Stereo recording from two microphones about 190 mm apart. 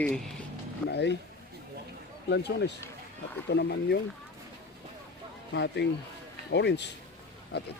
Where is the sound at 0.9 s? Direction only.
65° left (ahead or behind).